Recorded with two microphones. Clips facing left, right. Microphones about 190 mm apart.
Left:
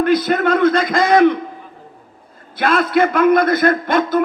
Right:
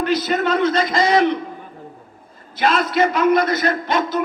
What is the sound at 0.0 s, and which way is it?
A man's voice, 55° left (ahead or behind).